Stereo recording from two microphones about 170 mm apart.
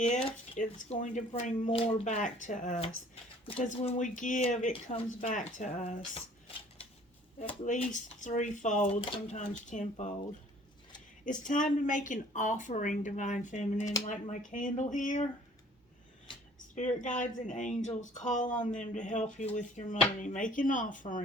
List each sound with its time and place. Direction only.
0.0 s speech: 35° left (ahead or behind)
0.5 s speech: 50° left (ahead or behind)
7.6 s speech: 45° left (ahead or behind)
9.0 s speech: 30° left (ahead or behind)
9.5 s speech: 45° left (ahead or behind)
11.3 s speech: 50° left (ahead or behind)
16.7 s speech: 45° left (ahead or behind)